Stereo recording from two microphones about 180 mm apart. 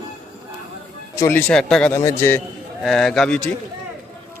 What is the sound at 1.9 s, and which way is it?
Speech, 15° left (ahead or behind).